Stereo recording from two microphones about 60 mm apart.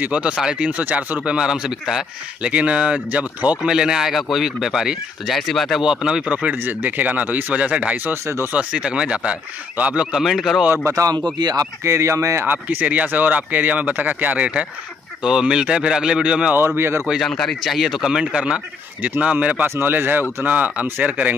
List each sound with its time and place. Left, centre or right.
0.0 s speech: centre
2.4 s speech: right
3.7 s speech: centre
5.8 s speech: centre
6.5 s speech: right
10.1 s speech: centre
10.9 s speech: right
11.8 s speech: right
12.4 s speech: right; by 16.5 s centre
16.5 s speech: right
17.2 s speech: centre
18.2 s speech: centre
19.6 s speech: right